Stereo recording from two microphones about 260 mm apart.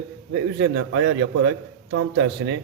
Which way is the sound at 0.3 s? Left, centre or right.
Right.